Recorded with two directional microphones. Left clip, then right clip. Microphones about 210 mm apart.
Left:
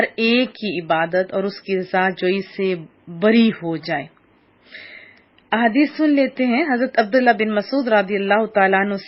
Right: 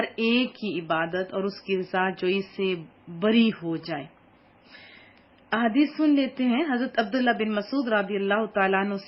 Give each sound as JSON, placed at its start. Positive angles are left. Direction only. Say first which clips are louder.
{"t": 0.2, "sound": "a woman's voice", "louder": "left 7 dB", "side_deg": 20}
{"t": 5.5, "sound": "a woman's voice", "louder": "left 7 dB", "side_deg": 20}